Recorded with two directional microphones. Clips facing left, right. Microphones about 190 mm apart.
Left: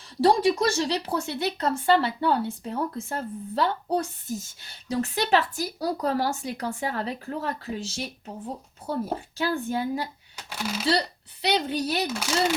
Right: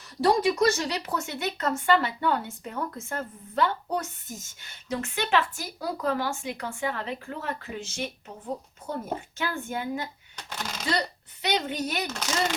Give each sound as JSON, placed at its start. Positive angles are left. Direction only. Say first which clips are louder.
{"t": 0.0, "sound": "speech", "louder": "left 2 dB", "side_deg": 30}
{"t": 10.3, "sound": "speech", "louder": "left 6 dB", "side_deg": 10}
{"t": 11.4, "sound": "speech", "louder": "left 3 dB", "side_deg": 35}
{"t": 12.0, "sound": "speech", "louder": "left 3 dB", "side_deg": 10}